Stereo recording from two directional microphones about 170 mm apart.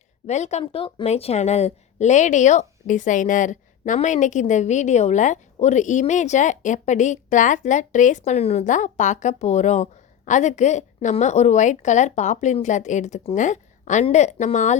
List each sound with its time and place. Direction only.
0.3 s a woman's voice: 40° left (ahead or behind)